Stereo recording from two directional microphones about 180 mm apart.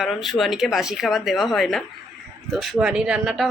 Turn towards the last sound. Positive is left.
turn(degrees=0)  # may be behind; listen again after turning